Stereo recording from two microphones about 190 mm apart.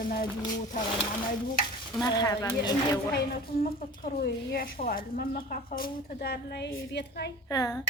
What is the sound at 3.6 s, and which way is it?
A woman's voice, 50° left (ahead or behind).